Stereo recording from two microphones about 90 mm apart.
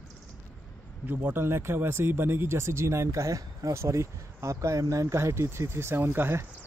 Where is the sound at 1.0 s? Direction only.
25° right (ahead or behind).